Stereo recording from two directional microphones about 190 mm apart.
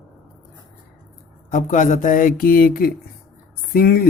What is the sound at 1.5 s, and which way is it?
Speech, 40° left (ahead or behind).